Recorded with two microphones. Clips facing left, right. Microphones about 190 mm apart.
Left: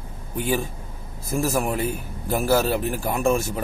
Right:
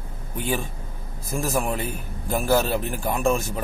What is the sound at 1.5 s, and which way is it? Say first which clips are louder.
Speech: right 1 dB; 15° left (ahead or behind).